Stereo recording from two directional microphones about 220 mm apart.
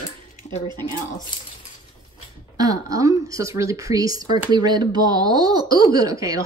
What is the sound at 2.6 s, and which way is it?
A woman's voice, 15° right (ahead or behind).